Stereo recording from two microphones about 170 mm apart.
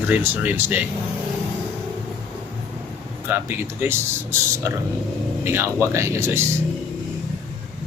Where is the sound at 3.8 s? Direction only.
15° right (ahead or behind).